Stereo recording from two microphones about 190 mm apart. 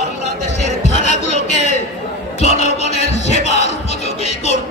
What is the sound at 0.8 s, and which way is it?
Chatter, 35° left (ahead or behind).